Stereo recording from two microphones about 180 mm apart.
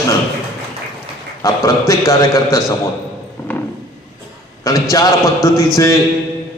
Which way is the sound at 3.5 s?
10° left (ahead or behind).